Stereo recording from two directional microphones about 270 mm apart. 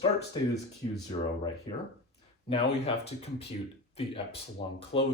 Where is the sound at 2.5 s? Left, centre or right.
Left.